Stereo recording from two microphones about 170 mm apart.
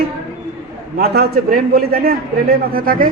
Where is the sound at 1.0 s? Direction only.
70° right (ahead or behind).